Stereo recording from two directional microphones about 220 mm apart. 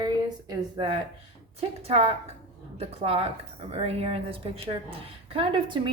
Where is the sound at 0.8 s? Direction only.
20° right (ahead or behind).